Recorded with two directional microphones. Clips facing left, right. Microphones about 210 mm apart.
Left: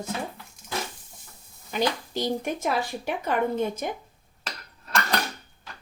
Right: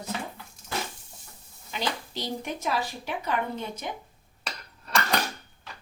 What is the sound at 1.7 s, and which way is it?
Speech, 50° left (ahead or behind).